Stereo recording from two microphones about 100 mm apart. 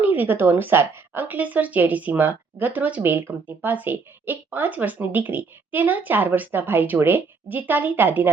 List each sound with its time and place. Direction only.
0.0 s a woman's voice: 20° right (ahead or behind)